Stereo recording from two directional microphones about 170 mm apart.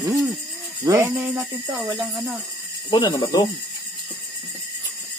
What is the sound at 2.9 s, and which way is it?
Speech, 25° left (ahead or behind).